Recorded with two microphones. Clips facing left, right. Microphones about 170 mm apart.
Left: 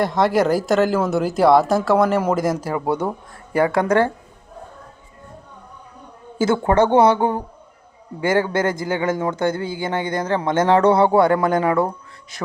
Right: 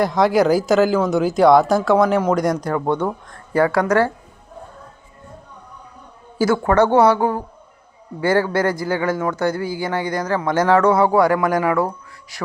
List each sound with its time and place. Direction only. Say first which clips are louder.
0.0 s speech: right 2 dB; centre (ahead or behind); by 4.1 s 25° left (ahead or behind)
6.4 s speech: right 1 dB; 25° left (ahead or behind)